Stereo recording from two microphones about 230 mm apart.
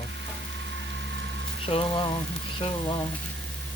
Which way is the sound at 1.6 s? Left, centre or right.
Left.